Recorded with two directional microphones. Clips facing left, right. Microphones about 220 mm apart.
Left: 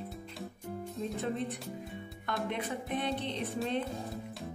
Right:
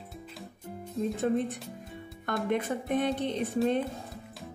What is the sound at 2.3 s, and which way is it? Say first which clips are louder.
Speech: right 6 dB; 45° right (ahead or behind).